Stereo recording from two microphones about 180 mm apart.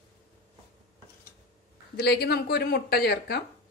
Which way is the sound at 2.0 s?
65° left (ahead or behind).